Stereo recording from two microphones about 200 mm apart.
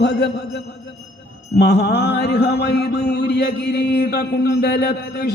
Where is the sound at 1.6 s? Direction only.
55° left (ahead or behind).